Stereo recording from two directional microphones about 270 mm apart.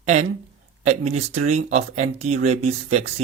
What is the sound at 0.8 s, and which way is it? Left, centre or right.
Speech, right.